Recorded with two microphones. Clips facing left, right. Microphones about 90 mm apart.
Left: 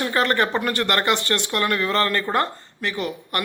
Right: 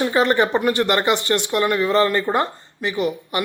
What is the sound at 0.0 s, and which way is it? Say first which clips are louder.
Speech: right 3 dB; 15° right (ahead or behind).